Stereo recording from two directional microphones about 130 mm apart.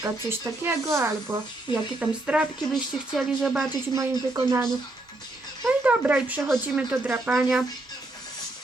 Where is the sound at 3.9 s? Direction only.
25° right (ahead or behind).